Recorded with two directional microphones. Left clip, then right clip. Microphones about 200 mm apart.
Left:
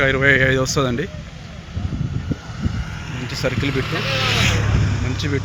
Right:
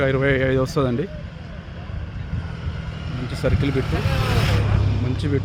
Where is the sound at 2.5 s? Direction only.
65° right (ahead or behind).